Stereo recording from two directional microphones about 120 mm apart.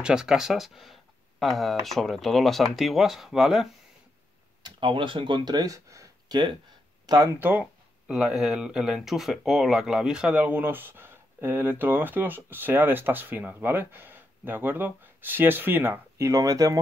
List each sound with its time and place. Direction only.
0.0 s speech: 5° right (ahead or behind)
4.6 s speech: 45° right (ahead or behind)
7.3 s speech: 15° right (ahead or behind)
8.1 s speech: 5° right (ahead or behind); by 16.8 s 30° right (ahead or behind)